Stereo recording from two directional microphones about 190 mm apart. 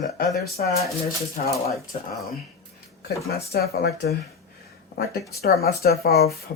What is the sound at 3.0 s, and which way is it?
Speech, 55° left (ahead or behind).